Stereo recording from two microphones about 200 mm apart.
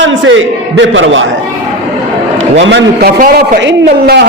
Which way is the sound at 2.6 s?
60° right (ahead or behind).